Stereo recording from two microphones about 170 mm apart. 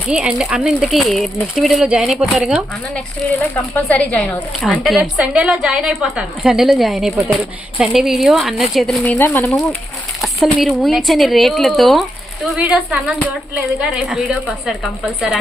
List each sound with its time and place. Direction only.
0.1 s speech: 5° right (ahead or behind)
3.5 s speech: 10° left (ahead or behind)
9.1 s speech: 10° left (ahead or behind)
10.2 s speech: centre (ahead or behind)